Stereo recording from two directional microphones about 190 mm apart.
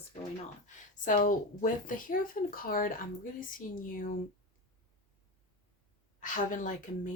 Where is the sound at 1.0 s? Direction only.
45° left (ahead or behind).